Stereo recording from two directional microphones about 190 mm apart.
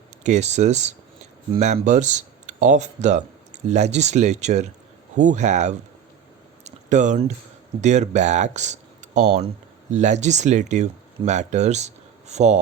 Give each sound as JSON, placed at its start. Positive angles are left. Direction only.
{"t": 0.2, "sound": "speech", "side_deg": -40}